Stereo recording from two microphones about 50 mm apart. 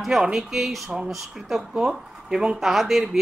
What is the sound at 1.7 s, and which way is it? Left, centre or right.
Speech, centre.